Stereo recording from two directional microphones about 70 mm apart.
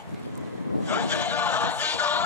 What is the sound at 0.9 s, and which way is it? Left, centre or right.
Music, left.